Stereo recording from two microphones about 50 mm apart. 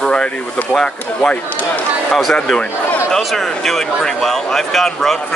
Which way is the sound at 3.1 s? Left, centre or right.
Centre.